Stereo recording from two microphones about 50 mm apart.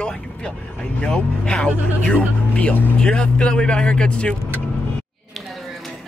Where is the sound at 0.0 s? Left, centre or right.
Centre.